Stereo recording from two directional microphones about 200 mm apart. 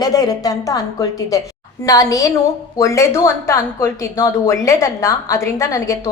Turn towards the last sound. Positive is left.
turn(degrees=15)  # may be behind; listen again after turning